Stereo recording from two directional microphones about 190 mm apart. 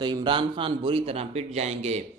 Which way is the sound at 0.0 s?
25° right (ahead or behind).